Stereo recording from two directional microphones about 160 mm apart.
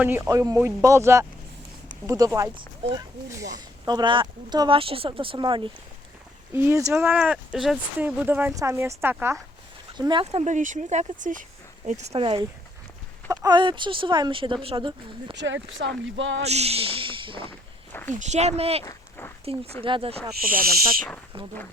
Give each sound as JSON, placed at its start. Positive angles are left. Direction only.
{"t": 0.3, "sound": "speech", "side_deg": -20}
{"t": 6.5, "sound": "speech", "side_deg": -15}
{"t": 10.0, "sound": "speech", "side_deg": -30}
{"t": 10.2, "sound": "speech", "side_deg": -45}
{"t": 15.8, "sound": "speech", "side_deg": -90}
{"t": 16.4, "sound": "speech", "side_deg": -40}
{"t": 18.1, "sound": "speech", "side_deg": -45}
{"t": 18.9, "sound": "a sound", "side_deg": 15}
{"t": 19.5, "sound": "speech", "side_deg": -40}
{"t": 20.4, "sound": "owl", "side_deg": -60}
{"t": 21.3, "sound": "speech", "side_deg": -35}